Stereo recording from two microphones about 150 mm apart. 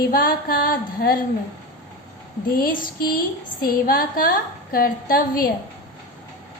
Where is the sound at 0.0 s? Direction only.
75° left (ahead or behind).